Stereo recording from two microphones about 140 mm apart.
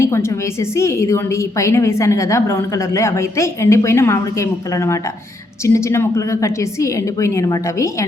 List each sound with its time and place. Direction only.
0.0 s a woman's voice: 20° left (ahead or behind)